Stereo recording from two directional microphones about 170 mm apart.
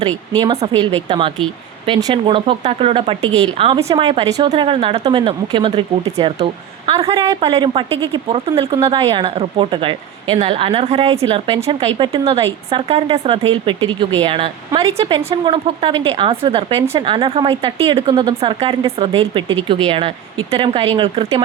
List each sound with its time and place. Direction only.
0.8 s a woman's voice: 30° right (ahead or behind)